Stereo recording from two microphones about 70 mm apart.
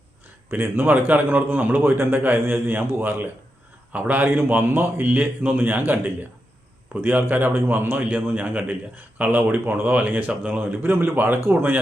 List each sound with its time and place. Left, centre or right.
0.5 s a man's voice: right